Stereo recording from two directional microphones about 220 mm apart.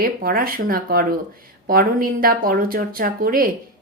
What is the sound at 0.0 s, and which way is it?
Speech, 40° right (ahead or behind).